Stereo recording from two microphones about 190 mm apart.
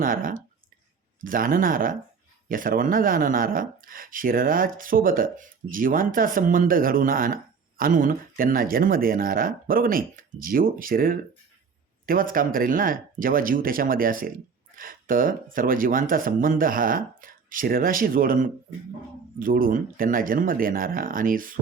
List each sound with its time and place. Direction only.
0.0 s speech: 45° right (ahead or behind)